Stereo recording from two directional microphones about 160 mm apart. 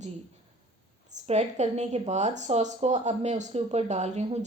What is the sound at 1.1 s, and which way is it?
A woman's voice, 45° right (ahead or behind).